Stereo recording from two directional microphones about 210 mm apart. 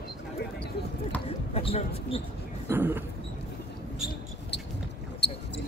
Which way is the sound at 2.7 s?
10° right (ahead or behind).